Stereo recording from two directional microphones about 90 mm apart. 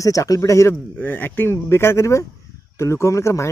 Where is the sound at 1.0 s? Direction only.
20° left (ahead or behind).